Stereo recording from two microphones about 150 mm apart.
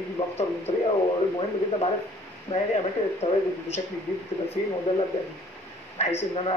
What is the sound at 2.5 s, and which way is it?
Speech, 45° left (ahead or behind).